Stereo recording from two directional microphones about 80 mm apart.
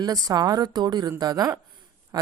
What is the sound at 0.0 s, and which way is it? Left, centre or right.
A woman's voice, right.